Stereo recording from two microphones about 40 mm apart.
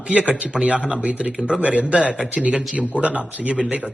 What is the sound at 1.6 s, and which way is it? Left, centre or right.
Speech, right.